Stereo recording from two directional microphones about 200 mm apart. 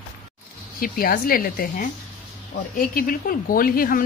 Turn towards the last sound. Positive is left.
turn(degrees=45)  # may be behind; listen again after turning